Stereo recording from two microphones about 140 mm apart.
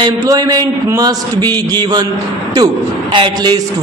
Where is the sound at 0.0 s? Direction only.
25° right (ahead or behind).